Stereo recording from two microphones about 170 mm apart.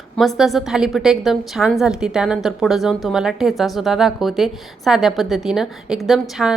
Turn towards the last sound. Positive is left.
turn(degrees=0)  # may be behind; listen again after turning